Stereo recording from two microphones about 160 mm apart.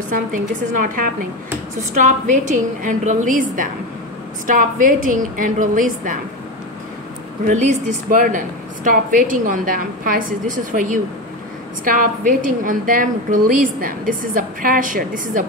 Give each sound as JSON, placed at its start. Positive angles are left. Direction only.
{"t": 0.1, "sound": "a woman's voice", "side_deg": -60}
{"t": 7.4, "sound": "a woman's voice", "side_deg": -45}